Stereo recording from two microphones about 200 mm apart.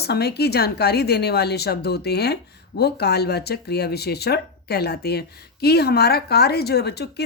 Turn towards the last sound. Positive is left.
turn(degrees=55)  # may be behind; listen again after turning